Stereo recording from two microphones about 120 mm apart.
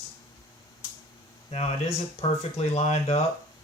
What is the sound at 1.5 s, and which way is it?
Speech, 65° left (ahead or behind).